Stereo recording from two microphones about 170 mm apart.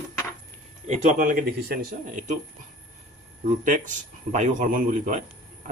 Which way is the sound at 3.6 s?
50° right (ahead or behind).